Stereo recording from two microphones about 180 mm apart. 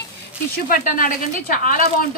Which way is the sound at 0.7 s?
50° left (ahead or behind).